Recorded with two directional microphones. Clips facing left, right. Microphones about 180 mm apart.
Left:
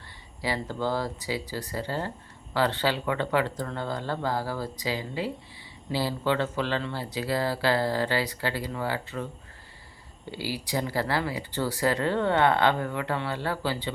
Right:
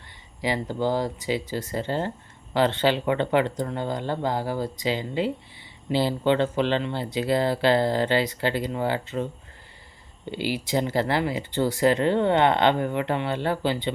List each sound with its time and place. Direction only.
0.4 s speech: 15° right (ahead or behind)
10.3 s speech: 20° right (ahead or behind)